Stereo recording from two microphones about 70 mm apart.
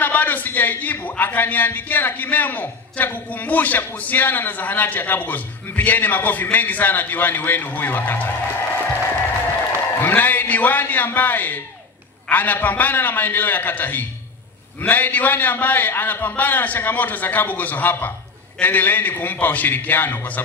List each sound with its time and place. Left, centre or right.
0.0 s a man's voice: left
9.8 s a man's voice: left